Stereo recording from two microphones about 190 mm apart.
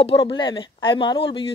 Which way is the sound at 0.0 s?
30° left (ahead or behind).